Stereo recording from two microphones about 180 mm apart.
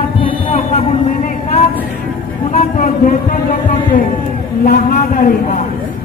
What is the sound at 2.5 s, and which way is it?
Speech, 50° left (ahead or behind).